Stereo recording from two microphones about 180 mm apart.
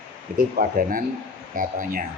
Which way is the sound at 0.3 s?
50° right (ahead or behind).